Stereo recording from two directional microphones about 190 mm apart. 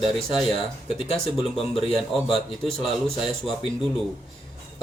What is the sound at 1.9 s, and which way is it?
A man's voice, 5° left (ahead or behind).